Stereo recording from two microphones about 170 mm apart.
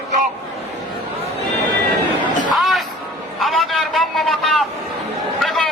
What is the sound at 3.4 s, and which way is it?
Vehicle, centre (ahead or behind).